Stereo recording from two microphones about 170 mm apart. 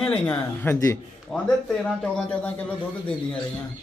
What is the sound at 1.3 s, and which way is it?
A man's voice, centre (ahead or behind).